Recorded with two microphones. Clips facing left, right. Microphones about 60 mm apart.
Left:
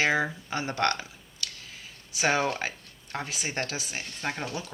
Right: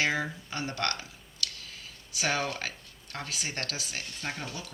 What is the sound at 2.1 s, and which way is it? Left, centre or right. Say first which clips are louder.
Speech: left 5 dB; left.